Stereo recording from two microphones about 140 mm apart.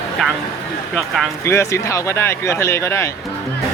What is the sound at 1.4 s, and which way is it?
Speech, 20° left (ahead or behind).